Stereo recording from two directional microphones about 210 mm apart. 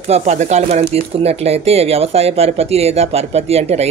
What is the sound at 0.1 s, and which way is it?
Speech, 30° right (ahead or behind).